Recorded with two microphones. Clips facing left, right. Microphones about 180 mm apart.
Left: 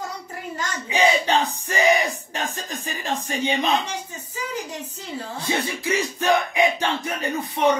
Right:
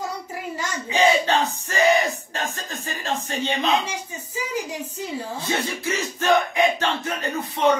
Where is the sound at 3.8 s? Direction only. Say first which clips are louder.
Even; 10° right (ahead or behind).